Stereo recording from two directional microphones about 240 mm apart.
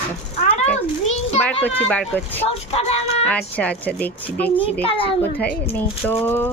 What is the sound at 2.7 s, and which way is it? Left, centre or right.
Speech, left.